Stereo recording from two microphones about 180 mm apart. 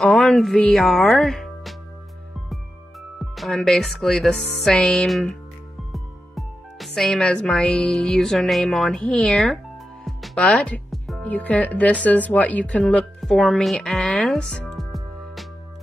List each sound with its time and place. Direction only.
0.0 s speech: centre (ahead or behind)
3.3 s speech: centre (ahead or behind)